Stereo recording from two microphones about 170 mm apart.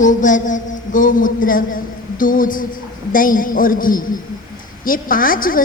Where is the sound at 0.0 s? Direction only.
50° left (ahead or behind).